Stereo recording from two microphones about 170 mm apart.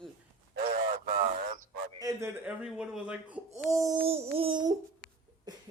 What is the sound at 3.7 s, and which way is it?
Speech, 20° right (ahead or behind).